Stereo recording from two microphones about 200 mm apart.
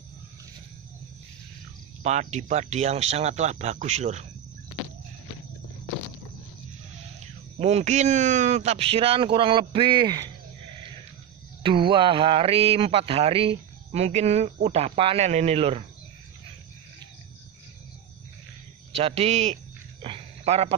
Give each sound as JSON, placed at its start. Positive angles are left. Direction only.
{"t": 2.0, "sound": "speech", "side_deg": -35}
{"t": 7.5, "sound": "speech", "side_deg": -30}
{"t": 11.6, "sound": "speech", "side_deg": -25}
{"t": 18.9, "sound": "cricket", "side_deg": -30}